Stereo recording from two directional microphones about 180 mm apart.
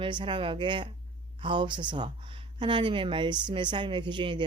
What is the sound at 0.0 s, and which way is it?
Speech, 25° right (ahead or behind).